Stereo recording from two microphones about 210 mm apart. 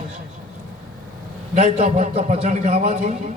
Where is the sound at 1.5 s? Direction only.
30° right (ahead or behind).